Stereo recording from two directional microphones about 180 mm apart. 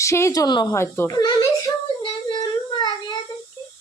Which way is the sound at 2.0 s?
25° left (ahead or behind).